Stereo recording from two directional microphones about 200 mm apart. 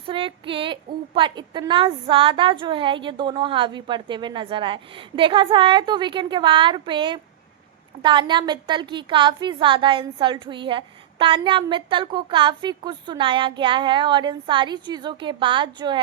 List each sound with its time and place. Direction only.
0.0 s a woman's voice: 25° right (ahead or behind)